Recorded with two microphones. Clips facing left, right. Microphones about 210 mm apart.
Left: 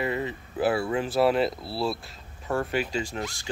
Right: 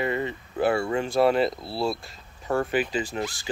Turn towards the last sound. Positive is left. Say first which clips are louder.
# right 2 dB
turn(degrees=0)  # may be behind; listen again after turning